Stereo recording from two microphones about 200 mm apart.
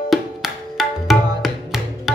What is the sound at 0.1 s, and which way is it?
Music, centre (ahead or behind).